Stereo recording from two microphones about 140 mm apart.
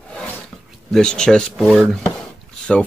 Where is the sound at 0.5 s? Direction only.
5° left (ahead or behind).